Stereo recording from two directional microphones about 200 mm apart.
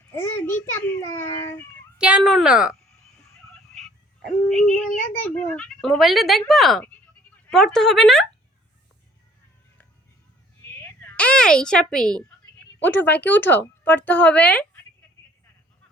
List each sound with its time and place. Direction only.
0.1 s speech: 10° left (ahead or behind)
2.0 s speech: 5° right (ahead or behind)
4.4 s speech: 5° left (ahead or behind)
4.9 s speech: 40° left (ahead or behind)
5.3 s speech: 5° left (ahead or behind)
10.8 s a sound: 5° left (ahead or behind)
12.8 s speech: 10° left (ahead or behind)